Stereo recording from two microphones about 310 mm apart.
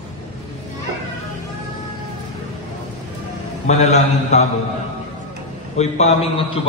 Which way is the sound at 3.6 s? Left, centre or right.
Left.